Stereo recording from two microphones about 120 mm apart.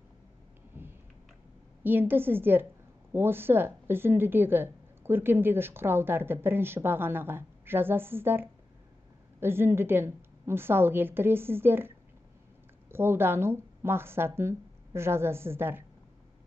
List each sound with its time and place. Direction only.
0.7 s a sound: 15° right (ahead or behind)
1.8 s a woman's voice: 15° right (ahead or behind)
12.9 s a woman's voice: 20° right (ahead or behind)